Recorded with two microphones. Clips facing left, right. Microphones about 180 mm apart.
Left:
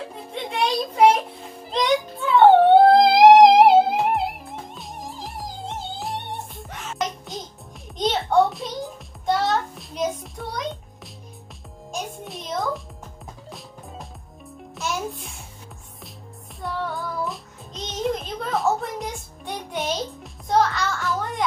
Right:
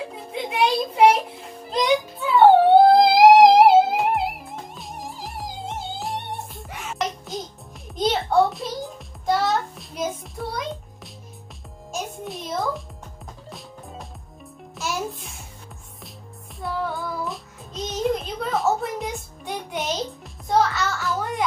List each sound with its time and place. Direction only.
0.3 s a sound: 10° right (ahead or behind)
1.7 s music: 5° right (ahead or behind)
11.9 s music: centre (ahead or behind)
14.8 s music: centre (ahead or behind)
16.6 s music: centre (ahead or behind)